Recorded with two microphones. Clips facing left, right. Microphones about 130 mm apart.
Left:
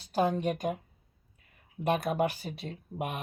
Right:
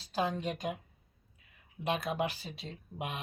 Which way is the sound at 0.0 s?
55° left (ahead or behind).